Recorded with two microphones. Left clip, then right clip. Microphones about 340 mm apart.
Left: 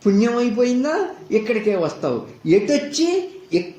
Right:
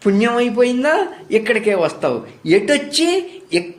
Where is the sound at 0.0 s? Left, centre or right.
Right.